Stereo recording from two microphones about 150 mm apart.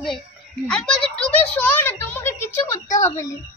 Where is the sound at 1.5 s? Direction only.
10° left (ahead or behind).